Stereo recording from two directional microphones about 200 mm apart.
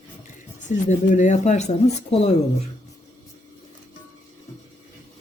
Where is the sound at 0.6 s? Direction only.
40° left (ahead or behind).